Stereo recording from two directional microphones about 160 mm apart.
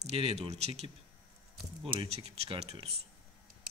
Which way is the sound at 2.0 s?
40° right (ahead or behind).